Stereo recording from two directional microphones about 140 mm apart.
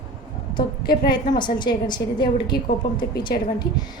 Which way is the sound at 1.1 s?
35° left (ahead or behind).